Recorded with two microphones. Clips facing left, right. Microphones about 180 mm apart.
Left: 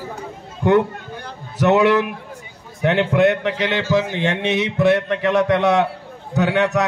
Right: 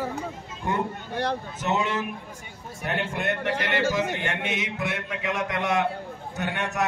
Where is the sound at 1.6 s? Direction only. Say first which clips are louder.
Left 14 dB; 70° left (ahead or behind).